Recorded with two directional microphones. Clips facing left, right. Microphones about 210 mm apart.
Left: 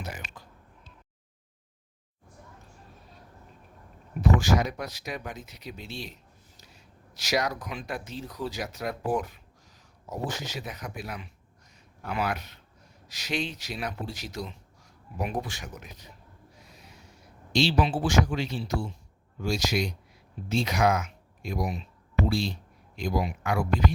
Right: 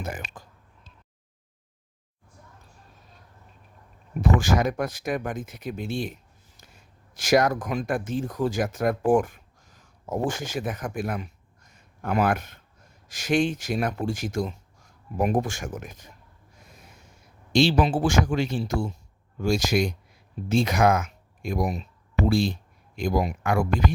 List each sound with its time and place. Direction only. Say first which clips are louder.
0.0 s speech: right 5 dB; 50° right (ahead or behind)
4.2 s speech: right 2 dB; 50° right (ahead or behind)
16.6 s a sound: right 3 dB; 50° right (ahead or behind)
19.4 s speech: right 5 dB; 50° right (ahead or behind)